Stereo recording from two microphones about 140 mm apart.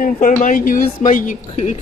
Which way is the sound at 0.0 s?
80° left.